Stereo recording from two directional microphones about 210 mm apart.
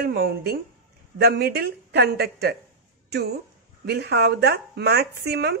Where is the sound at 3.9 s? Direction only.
50° right (ahead or behind).